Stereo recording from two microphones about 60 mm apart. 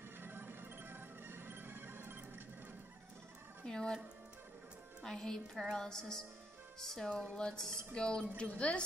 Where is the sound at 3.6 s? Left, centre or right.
Centre.